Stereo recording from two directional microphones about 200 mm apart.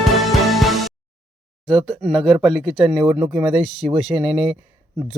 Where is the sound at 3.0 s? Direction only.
15° right (ahead or behind).